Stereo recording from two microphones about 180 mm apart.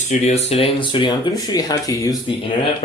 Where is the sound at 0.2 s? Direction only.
35° left (ahead or behind).